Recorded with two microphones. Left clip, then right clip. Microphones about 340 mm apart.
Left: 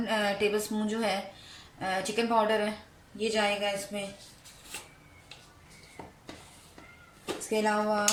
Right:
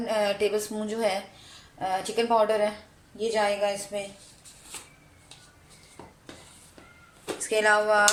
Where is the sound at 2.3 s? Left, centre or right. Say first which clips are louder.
Right 4 dB; centre.